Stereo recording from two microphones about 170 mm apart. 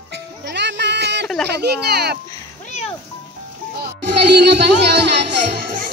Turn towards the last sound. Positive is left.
turn(degrees=-90)